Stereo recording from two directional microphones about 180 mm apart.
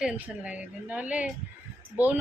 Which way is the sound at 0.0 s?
5° right (ahead or behind).